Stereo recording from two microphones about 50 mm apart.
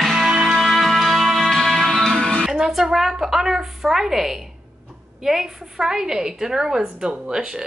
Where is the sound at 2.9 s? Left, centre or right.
Centre.